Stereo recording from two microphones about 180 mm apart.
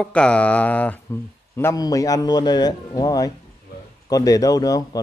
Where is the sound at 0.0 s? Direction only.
5° left (ahead or behind).